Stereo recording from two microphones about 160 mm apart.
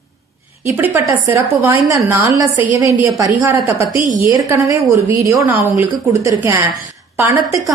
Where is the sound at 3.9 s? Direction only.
55° right (ahead or behind).